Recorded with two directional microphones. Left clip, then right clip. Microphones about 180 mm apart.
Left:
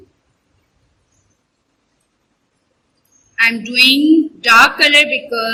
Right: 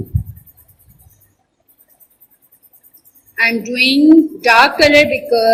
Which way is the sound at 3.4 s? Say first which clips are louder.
Left 2 dB; 35° left (ahead or behind).